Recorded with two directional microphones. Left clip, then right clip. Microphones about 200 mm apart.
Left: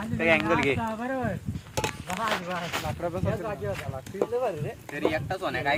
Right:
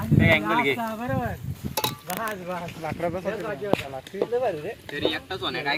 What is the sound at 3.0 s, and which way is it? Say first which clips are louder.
Speech: right 6 dB; 35° right (ahead or behind).